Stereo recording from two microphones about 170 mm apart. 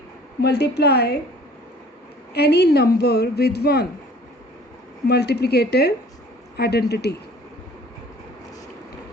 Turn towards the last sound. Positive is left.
turn(degrees=75)  # may be behind; listen again after turning